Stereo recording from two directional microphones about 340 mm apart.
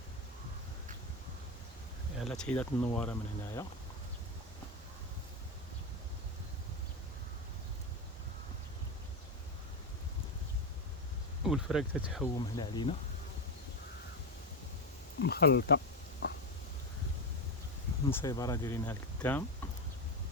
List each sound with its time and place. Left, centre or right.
2.1 s speech: centre
11.4 s speech: centre
12.5 s speech: centre
15.2 s speech: left
18.1 s speech: centre